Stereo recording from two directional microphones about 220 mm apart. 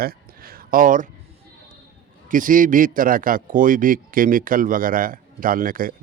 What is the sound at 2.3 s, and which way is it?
A man's voice, 35° right (ahead or behind).